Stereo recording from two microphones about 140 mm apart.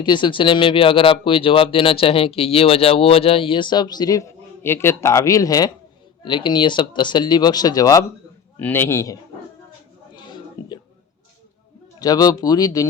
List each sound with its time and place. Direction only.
0.0 s speech: 35° left (ahead or behind)
8.5 s a man's voice: 15° left (ahead or behind)
10.2 s a sound: 30° left (ahead or behind)
11.9 s speech: 30° left (ahead or behind)